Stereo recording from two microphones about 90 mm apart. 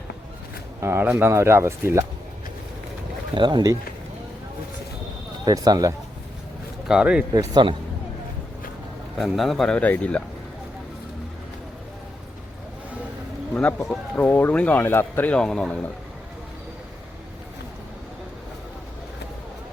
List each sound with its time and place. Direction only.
0.8 s speech: 25° right (ahead or behind)
3.3 s speech: 60° right (ahead or behind)
5.5 s speech: 45° right (ahead or behind)
6.8 s speech: 10° right (ahead or behind)
7.3 s speech: 60° right (ahead or behind)
9.1 s speech: centre (ahead or behind)
9.7 s speech: 15° left (ahead or behind)
13.5 s speech: 15° left (ahead or behind)
15.4 s speech: 5° left (ahead or behind)